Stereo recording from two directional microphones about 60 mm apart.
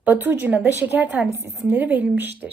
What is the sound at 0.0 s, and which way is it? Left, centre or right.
A woman's voice, right.